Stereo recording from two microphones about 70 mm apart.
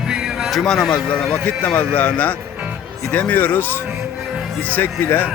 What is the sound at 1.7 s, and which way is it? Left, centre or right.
Speech, left.